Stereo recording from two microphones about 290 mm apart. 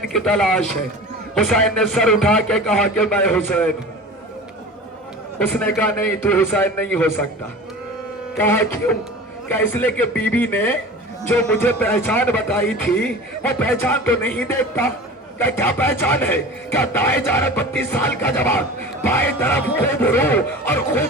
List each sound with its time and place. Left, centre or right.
0.1 s a man's voice: centre
5.5 s a man's voice: centre
8.4 s a man's voice: centre